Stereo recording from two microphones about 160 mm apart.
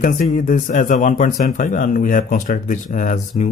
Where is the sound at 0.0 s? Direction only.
55° left (ahead or behind).